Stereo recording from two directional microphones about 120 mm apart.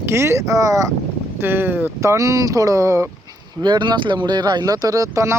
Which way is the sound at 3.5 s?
35° right (ahead or behind).